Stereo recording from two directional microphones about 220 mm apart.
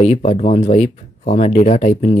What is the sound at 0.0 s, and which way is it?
Speech, 30° left (ahead or behind).